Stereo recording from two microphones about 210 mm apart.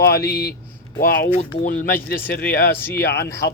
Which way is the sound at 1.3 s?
30° left (ahead or behind).